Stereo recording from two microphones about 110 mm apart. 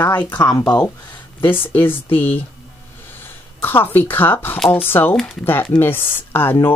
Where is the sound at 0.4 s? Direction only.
30° left (ahead or behind).